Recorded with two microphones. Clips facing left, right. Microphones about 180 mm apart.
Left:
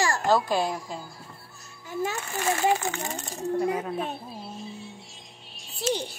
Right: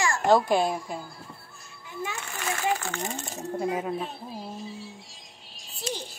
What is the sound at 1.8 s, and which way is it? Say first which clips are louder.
Speech: left 6 dB; 40° left (ahead or behind).